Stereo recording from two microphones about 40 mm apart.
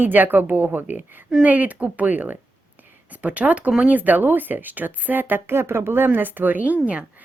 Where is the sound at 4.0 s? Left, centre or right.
Right.